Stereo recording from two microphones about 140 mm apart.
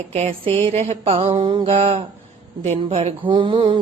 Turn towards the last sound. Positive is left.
turn(degrees=-35)  # may be behind; listen again after turning